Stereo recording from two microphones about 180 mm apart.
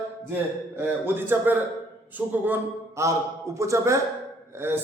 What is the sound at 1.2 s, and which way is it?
A man's voice, 10° right (ahead or behind).